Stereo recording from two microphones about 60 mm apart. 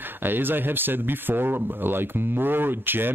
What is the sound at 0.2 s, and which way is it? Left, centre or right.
Speech, right.